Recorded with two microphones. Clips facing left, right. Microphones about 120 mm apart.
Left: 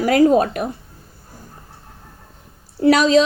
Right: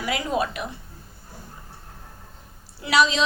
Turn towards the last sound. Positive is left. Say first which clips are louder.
# left 8 dB
turn(degrees=45)  # may be behind; listen again after turning